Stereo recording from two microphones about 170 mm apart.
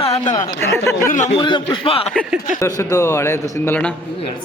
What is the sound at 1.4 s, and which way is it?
Speech, 30° left (ahead or behind).